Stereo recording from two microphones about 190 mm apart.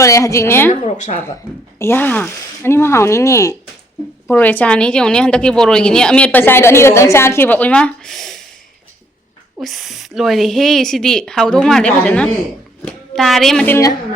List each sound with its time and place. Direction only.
0.0 s a woman's voice: 15° left (ahead or behind)
0.7 s speech: 40° left (ahead or behind)
1.8 s a woman's voice: 10° left (ahead or behind)
9.6 s speech: centre (ahead or behind)